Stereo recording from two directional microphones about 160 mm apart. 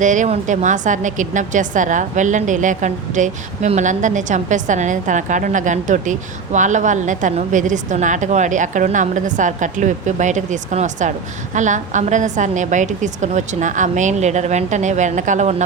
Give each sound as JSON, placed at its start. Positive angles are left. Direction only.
{"t": 0.0, "sound": "a woman's voice", "side_deg": -50}